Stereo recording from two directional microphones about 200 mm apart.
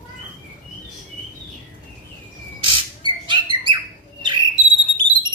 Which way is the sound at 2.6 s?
25° right (ahead or behind).